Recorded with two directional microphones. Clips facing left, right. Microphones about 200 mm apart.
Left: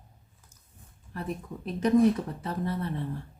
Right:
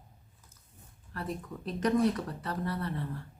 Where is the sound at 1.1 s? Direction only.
15° left (ahead or behind).